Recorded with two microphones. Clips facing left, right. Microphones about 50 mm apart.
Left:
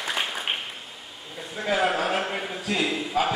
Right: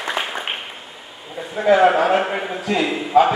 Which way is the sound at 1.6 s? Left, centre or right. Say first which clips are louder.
Right 10 dB; centre.